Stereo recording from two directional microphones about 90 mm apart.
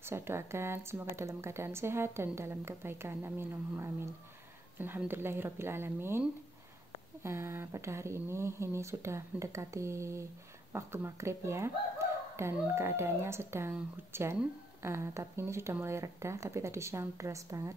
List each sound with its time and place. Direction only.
0.0 s a woman's voice: 30° right (ahead or behind)
7.2 s a woman's voice: 30° right (ahead or behind)